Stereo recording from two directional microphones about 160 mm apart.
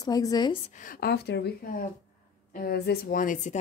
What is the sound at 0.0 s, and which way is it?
Speech, 20° left (ahead or behind).